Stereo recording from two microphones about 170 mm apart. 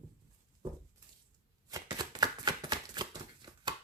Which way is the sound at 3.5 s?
25° right (ahead or behind).